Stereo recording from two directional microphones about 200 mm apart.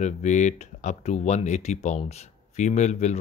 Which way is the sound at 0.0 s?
35° left (ahead or behind).